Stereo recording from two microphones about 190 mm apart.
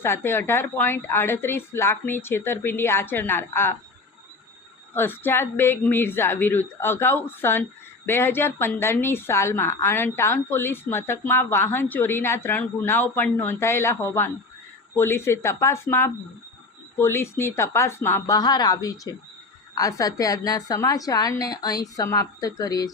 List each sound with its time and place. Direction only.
0.0 s a woman's voice: 10° left (ahead or behind)
4.9 s a woman's voice: 10° left (ahead or behind)